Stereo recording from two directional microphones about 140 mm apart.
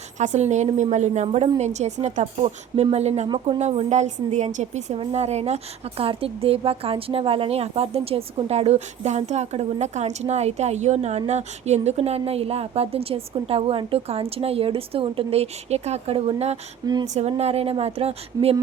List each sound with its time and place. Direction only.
0.2 s a woman's voice: 55° right (ahead or behind)
16.8 s speech: 30° right (ahead or behind)
17.2 s a woman's voice: 50° right (ahead or behind)